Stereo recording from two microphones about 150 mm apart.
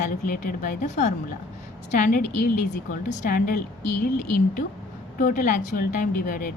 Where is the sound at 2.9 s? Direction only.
55° left (ahead or behind).